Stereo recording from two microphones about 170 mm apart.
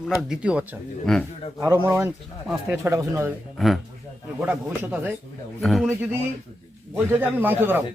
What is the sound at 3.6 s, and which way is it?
Speech, centre (ahead or behind).